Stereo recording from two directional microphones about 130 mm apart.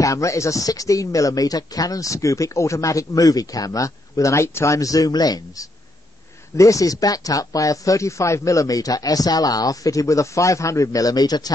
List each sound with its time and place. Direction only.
0.0 s speech: 25° left (ahead or behind)